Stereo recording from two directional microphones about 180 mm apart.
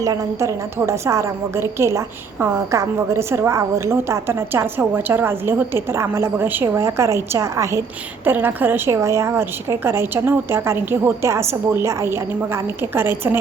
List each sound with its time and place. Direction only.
0.0 s a woman's voice: 15° right (ahead or behind)